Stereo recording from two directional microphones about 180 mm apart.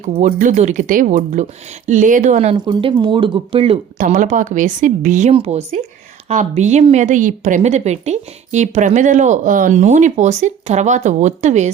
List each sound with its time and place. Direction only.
0.2 s a woman's voice: 45° right (ahead or behind); by 3.8 s 30° right (ahead or behind)
3.9 s a woman's voice: 45° right (ahead or behind)